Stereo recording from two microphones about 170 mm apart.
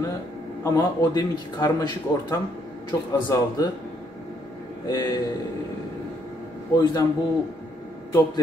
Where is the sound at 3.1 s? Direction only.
20° left (ahead or behind).